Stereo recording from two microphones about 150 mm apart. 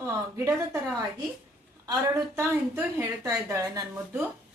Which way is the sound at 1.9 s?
20° right (ahead or behind).